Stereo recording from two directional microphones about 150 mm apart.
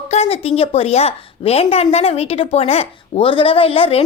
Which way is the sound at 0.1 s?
45° left (ahead or behind).